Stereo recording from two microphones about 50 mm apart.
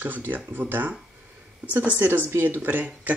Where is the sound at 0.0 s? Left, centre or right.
Right.